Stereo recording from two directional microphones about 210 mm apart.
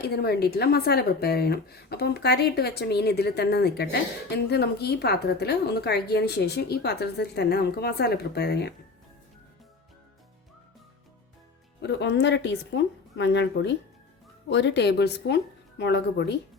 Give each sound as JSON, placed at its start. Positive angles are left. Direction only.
{"t": 0.0, "sound": "a woman's voice", "side_deg": 50}
{"t": 11.8, "sound": "a woman's voice", "side_deg": 55}